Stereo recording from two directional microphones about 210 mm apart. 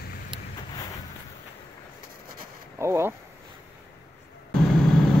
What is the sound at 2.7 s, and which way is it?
Speech, 10° right (ahead or behind).